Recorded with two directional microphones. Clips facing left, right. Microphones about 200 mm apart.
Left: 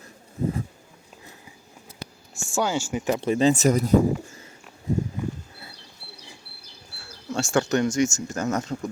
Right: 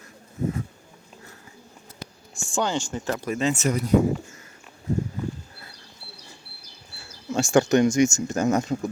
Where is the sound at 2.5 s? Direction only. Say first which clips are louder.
Left 1 dB; 10° left (ahead or behind).